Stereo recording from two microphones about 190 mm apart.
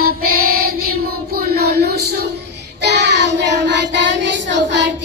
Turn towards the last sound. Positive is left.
turn(degrees=-65)  # may be behind; listen again after turning